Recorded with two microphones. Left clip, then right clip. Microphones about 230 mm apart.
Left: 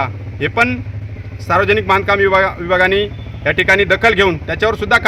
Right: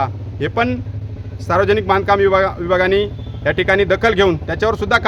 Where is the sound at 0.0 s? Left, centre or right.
Centre.